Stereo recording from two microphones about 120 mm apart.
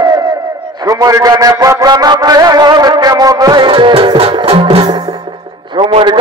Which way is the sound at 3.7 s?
45° right (ahead or behind).